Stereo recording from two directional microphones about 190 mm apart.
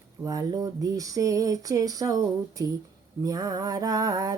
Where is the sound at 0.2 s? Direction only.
20° right (ahead or behind).